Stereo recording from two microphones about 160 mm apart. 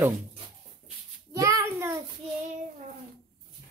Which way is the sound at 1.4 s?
20° right (ahead or behind).